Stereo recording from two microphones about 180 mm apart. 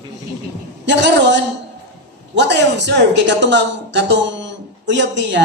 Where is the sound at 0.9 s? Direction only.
75° right (ahead or behind).